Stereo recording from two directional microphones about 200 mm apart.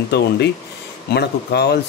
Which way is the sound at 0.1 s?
55° left (ahead or behind).